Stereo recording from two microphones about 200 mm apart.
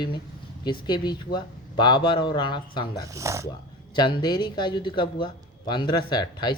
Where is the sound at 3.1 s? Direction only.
15° right (ahead or behind).